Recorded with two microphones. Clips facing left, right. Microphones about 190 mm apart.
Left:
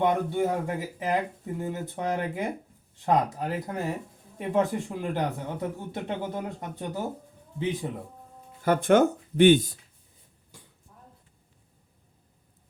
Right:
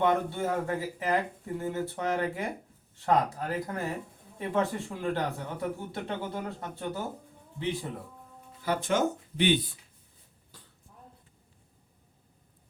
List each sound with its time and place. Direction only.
0.0 s a man's voice: 15° left (ahead or behind)
8.6 s speech: 55° left (ahead or behind)